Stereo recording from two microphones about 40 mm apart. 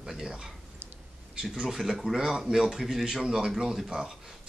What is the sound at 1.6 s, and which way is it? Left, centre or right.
Speech, centre.